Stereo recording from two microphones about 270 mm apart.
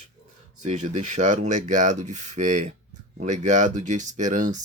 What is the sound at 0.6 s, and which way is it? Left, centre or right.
Speech, right.